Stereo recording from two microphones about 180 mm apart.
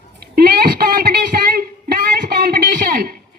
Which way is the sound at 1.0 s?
55° right (ahead or behind).